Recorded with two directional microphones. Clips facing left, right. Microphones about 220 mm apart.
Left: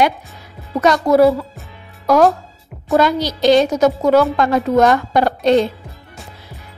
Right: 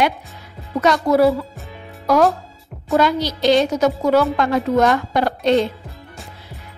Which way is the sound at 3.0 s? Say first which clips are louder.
Left 2 dB; 45° left (ahead or behind).